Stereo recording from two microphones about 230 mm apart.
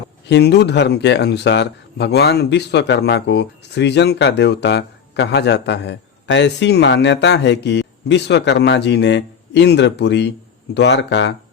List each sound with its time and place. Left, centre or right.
0.3 s speech: left